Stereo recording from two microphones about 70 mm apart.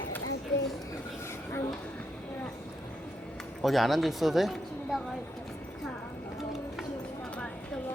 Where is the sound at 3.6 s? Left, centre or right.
Centre.